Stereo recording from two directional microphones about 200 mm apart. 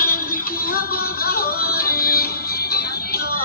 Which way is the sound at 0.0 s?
45° left (ahead or behind).